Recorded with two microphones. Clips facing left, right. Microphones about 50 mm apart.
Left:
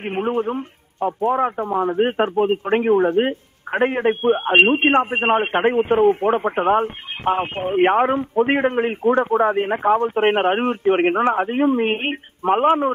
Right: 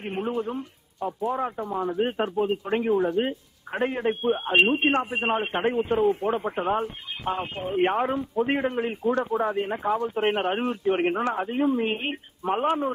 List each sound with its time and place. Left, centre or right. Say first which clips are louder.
0.0 s a man's voice: left 7 dB; left